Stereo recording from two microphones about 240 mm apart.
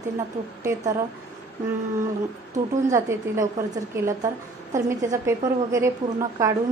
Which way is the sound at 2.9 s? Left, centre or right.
Centre.